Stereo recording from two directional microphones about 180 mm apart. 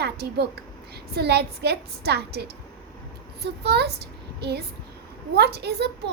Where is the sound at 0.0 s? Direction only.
65° right (ahead or behind).